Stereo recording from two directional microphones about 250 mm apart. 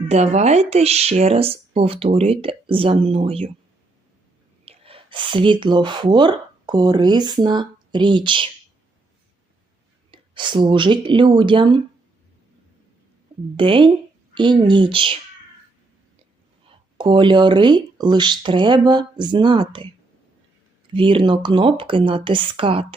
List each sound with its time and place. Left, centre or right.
0.1 s speech: right
4.6 s speech: right
10.1 s speech: centre
13.6 s speech: right
16.6 s speech: centre
20.9 s speech: right